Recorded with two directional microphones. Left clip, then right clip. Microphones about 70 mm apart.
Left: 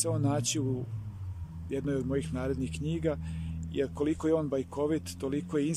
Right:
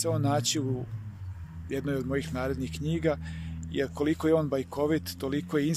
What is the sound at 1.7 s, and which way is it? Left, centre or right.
Speech, left.